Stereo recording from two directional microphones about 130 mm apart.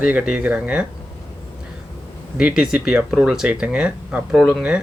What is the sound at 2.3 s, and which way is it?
Speech, 10° right (ahead or behind).